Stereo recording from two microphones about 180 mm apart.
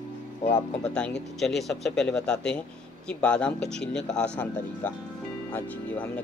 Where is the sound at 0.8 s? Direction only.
5° left (ahead or behind).